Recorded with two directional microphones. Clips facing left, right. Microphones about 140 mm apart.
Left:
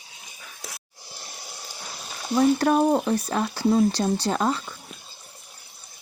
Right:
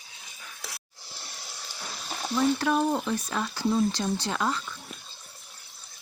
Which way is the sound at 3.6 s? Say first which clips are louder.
Left 5 dB; 55° left (ahead or behind).